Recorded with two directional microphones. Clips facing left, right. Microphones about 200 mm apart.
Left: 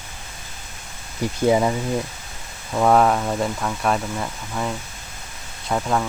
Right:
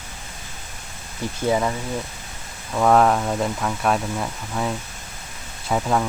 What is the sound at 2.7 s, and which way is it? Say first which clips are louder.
Speech: even; 5° left (ahead or behind).